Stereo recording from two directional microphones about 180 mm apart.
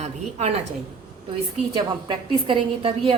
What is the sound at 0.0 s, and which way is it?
Speech, 40° right (ahead or behind).